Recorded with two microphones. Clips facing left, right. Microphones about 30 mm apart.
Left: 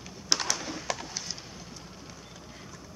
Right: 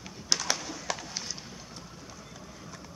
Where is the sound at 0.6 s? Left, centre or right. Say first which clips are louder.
Left 2 dB; left.